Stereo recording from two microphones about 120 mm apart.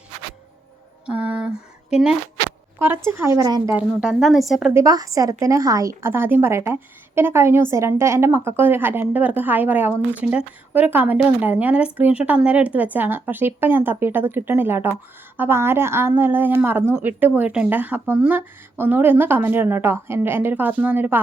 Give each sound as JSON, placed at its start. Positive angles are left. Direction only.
{"t": 1.0, "sound": "a sound", "side_deg": -10}
{"t": 2.7, "sound": "a woman's voice", "side_deg": -20}
{"t": 3.7, "sound": "a woman's voice", "side_deg": -10}
{"t": 4.7, "sound": "a woman's voice", "side_deg": -25}